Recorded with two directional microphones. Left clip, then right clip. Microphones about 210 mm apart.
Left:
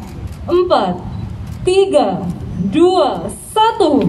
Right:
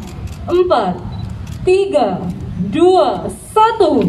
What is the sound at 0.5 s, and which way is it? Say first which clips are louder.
A woman's voice: even; 40° left (ahead or behind).